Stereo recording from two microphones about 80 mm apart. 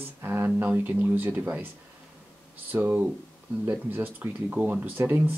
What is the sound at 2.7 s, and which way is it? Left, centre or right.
Speech, right.